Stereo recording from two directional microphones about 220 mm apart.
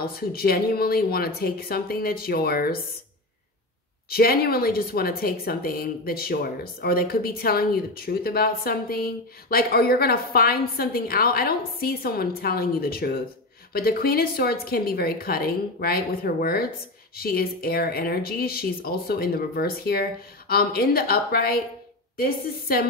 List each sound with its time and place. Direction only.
0.0 s a woman's voice: 45° left (ahead or behind)
4.1 s a woman's voice: 45° left (ahead or behind)